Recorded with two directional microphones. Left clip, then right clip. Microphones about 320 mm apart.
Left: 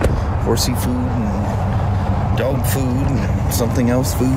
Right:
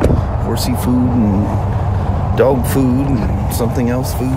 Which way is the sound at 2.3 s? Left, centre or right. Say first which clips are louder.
Right 9 dB; right.